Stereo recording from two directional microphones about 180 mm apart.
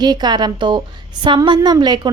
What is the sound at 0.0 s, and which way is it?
A woman's voice, 25° right (ahead or behind).